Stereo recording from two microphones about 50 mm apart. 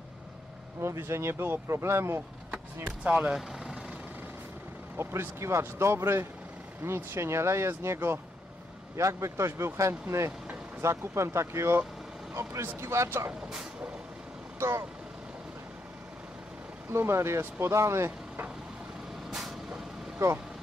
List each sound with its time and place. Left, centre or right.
0.7 s speech: right
2.5 s speech: right
3.3 s vehicle: centre
4.9 s speech: right
8.9 s a man's voice: right
9.5 s speech: right
9.8 s speech: right
12.8 s speech: right
14.6 s speech: right
16.9 s speech: right
19.3 s vehicle: centre